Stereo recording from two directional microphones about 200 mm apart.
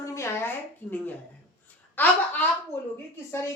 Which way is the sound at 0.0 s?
15° left (ahead or behind).